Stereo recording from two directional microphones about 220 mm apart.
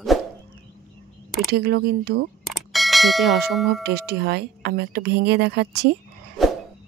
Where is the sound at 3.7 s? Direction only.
45° right (ahead or behind).